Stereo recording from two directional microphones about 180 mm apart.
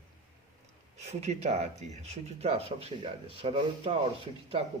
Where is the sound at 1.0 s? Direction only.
35° right (ahead or behind).